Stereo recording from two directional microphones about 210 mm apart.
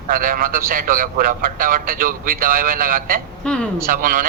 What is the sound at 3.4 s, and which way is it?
Speech, 5° left (ahead or behind).